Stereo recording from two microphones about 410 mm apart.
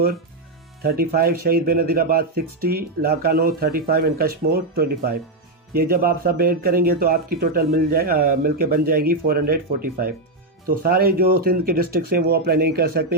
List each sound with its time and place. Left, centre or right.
0.8 s speech: right